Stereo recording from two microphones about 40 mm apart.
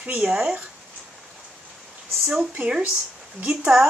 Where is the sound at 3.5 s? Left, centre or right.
Right.